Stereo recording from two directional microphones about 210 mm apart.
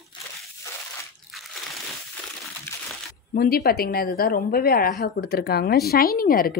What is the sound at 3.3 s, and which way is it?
Speech, 45° left (ahead or behind).